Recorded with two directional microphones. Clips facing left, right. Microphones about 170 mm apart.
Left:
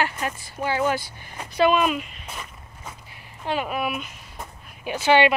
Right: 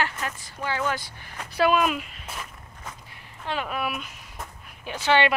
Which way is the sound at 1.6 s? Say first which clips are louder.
Left 2 dB; 5° right (ahead or behind).